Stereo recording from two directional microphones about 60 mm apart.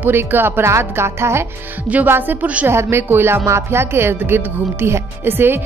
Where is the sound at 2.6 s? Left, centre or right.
Right.